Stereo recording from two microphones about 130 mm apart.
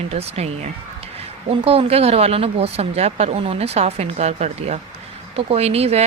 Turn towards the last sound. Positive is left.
turn(degrees=-50)  # may be behind; listen again after turning